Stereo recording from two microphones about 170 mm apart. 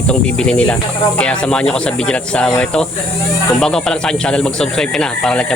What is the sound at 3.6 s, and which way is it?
Speech, 5° left (ahead or behind).